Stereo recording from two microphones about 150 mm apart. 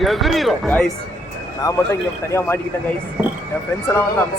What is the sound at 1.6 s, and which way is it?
Speech, 15° left (ahead or behind).